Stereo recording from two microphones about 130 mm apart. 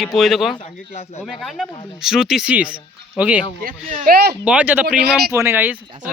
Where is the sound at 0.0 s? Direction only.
Centre (ahead or behind).